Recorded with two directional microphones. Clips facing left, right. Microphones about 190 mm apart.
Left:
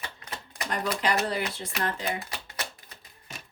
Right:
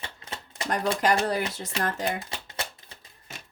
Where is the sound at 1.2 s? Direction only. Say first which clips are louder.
Right 3 dB; 45° right (ahead or behind).